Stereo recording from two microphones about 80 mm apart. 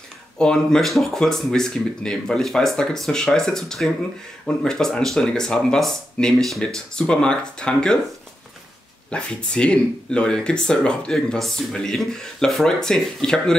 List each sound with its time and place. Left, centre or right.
0.4 s speech: centre
9.1 s speech: centre